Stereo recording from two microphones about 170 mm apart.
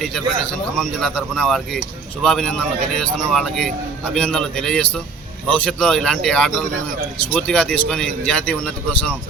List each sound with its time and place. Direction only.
0.8 s a man's voice: centre (ahead or behind)